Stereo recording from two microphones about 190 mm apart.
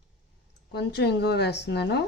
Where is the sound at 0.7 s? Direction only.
60° left (ahead or behind).